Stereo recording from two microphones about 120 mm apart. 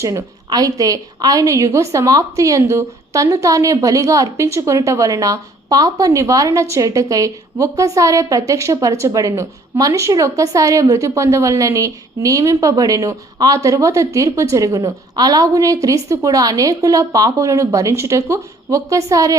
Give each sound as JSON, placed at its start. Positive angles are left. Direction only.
{"t": 0.0, "sound": "a woman's voice", "side_deg": -30}